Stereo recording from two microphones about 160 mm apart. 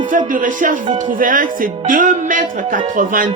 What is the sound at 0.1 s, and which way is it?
Speech, 55° right (ahead or behind).